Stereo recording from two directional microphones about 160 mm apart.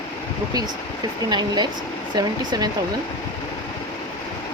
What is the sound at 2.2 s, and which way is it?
Speech, 25° right (ahead or behind).